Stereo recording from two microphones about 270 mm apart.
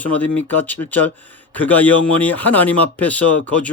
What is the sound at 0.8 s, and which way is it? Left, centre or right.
Speech, centre.